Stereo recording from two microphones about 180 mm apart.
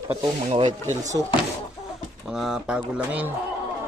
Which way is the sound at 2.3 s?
Centre (ahead or behind).